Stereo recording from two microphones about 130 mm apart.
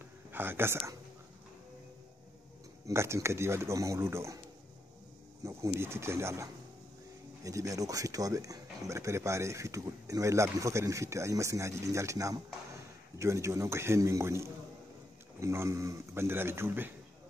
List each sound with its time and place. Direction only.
0.3 s speech: 15° right (ahead or behind)
2.9 s speech: 20° right (ahead or behind)
5.4 s speech: 20° right (ahead or behind)